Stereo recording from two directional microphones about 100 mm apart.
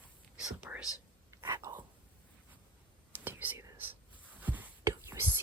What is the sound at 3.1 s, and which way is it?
Whispering, 20° right (ahead or behind).